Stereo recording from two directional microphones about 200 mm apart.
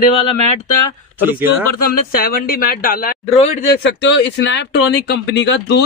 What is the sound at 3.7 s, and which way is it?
Speech, 60° left (ahead or behind).